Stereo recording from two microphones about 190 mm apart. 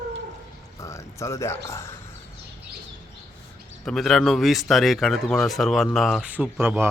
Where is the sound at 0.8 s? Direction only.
15° left (ahead or behind).